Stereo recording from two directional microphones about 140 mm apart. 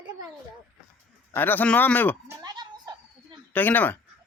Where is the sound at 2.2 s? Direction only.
25° right (ahead or behind).